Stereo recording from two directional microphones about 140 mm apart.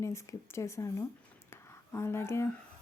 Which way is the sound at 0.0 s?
20° left (ahead or behind).